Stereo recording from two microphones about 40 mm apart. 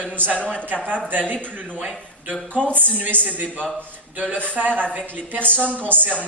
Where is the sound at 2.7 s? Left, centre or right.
Right.